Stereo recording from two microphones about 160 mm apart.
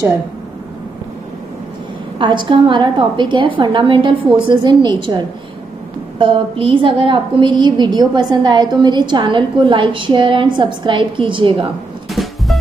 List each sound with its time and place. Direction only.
2.1 s a woman's voice: 30° right (ahead or behind)
12.1 s music: centre (ahead or behind)